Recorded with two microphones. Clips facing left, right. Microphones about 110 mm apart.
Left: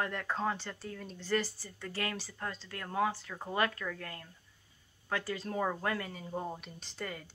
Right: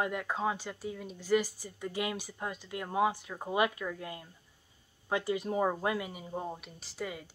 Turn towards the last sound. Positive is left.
turn(degrees=-5)  # may be behind; listen again after turning